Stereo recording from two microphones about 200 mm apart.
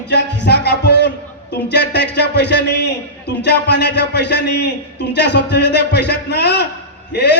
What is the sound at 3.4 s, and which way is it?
Speech, 55° left (ahead or behind).